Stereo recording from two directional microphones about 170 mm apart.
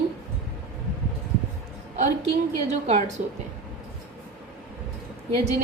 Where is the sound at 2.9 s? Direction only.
45° right (ahead or behind).